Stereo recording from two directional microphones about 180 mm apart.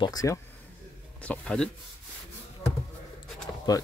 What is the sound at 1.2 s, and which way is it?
Speech, 5° left (ahead or behind).